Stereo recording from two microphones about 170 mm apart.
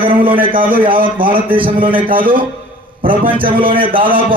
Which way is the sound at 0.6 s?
55° right (ahead or behind).